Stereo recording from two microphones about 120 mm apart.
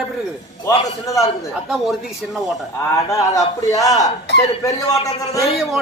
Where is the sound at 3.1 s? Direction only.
30° left (ahead or behind).